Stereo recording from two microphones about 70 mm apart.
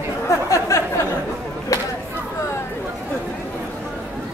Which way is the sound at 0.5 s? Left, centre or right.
Left.